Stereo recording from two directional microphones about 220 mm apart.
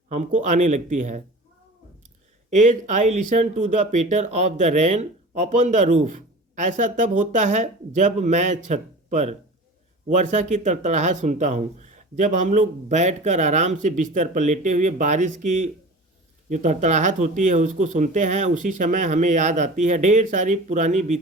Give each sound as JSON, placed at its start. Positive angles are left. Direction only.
{"t": 0.1, "sound": "speech", "side_deg": -35}
{"t": 2.5, "sound": "speech", "side_deg": -35}